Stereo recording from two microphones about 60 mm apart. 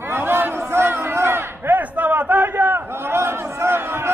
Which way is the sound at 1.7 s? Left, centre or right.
Right.